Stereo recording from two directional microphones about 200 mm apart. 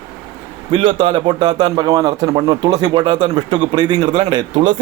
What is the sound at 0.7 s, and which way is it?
A man's voice, 25° right (ahead or behind).